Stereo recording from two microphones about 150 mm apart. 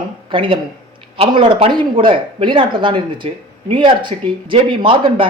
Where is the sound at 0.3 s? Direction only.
35° right (ahead or behind).